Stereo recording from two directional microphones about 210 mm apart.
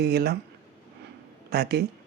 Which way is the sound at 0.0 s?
50° right (ahead or behind).